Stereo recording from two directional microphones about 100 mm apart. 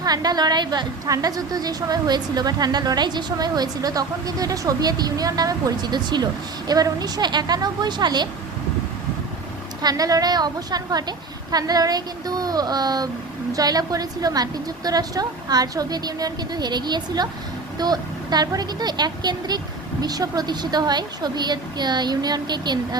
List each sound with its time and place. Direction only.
0.0 s a woman's voice: 40° right (ahead or behind)
9.8 s a woman's voice: 35° right (ahead or behind)